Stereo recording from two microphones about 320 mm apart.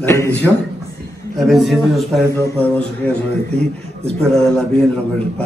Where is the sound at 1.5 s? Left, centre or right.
Centre.